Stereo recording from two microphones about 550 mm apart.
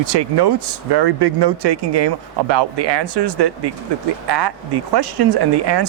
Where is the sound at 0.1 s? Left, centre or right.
Right.